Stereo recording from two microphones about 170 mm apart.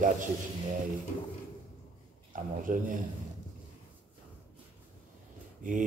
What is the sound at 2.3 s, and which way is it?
Speech, 50° right (ahead or behind).